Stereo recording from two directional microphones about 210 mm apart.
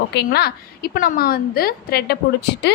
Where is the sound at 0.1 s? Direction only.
50° left (ahead or behind).